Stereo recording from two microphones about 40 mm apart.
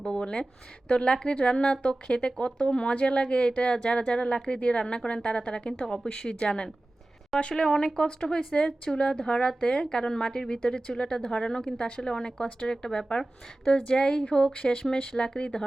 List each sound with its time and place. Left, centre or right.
0.0 s speech: left